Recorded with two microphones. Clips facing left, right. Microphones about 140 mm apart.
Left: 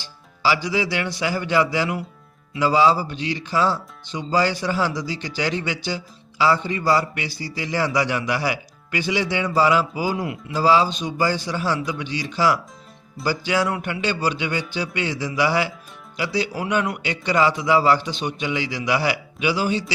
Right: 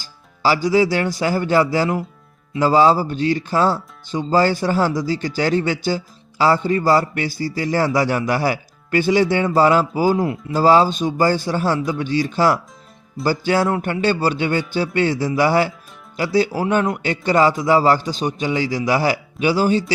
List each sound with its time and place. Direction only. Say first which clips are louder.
0.0 s a man's voice: right 3 dB; 45° right (ahead or behind)